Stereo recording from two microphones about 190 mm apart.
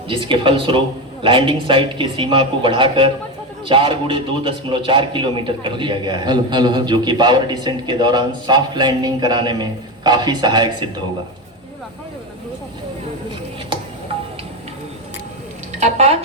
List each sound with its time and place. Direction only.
0.1 s a man's voice: 25° right (ahead or behind)
15.8 s speech: 35° right (ahead or behind)